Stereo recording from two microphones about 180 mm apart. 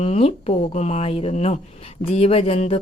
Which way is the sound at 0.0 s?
35° left (ahead or behind).